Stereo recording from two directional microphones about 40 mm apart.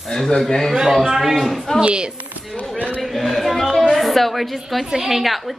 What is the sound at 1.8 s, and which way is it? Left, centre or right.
Speech, right.